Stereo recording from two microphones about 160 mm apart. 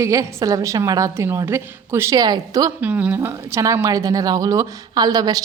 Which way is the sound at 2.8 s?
10° right (ahead or behind).